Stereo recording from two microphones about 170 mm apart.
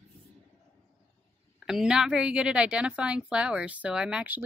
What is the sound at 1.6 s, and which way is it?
Speech, 5° right (ahead or behind).